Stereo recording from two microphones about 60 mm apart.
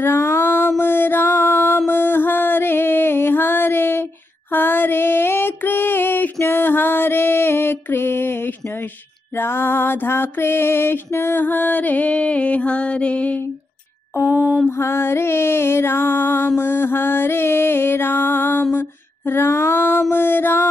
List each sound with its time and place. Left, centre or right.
0.0 s music: left
4.5 s a sound: left
9.4 s music: left
14.3 s mantra: centre
14.8 s music: left